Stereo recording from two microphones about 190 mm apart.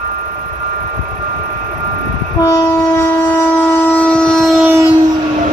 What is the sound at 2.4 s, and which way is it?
Shofar, 15° left (ahead or behind).